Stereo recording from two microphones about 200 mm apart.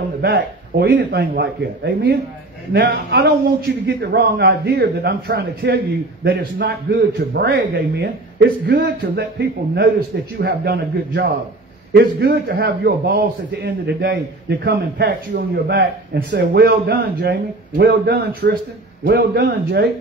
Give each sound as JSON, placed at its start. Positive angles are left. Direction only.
{"t": 0.2, "sound": "a man's voice", "side_deg": -50}